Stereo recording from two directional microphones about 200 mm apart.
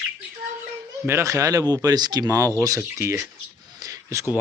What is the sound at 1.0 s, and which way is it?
Speech, 15° right (ahead or behind).